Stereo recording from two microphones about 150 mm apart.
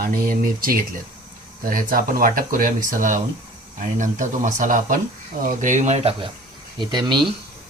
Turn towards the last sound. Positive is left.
turn(degrees=-30)  # may be behind; listen again after turning